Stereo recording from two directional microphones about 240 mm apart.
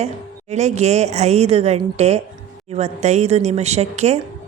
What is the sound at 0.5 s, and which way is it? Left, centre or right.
Speech, right.